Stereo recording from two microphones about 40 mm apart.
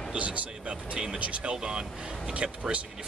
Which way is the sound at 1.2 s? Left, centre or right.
Right.